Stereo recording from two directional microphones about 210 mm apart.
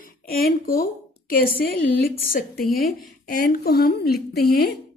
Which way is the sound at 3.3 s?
45° left (ahead or behind).